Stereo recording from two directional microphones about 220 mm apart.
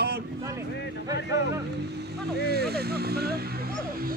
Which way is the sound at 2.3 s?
45° right (ahead or behind).